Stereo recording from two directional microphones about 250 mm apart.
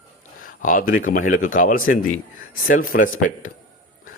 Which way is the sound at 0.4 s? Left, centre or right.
Left.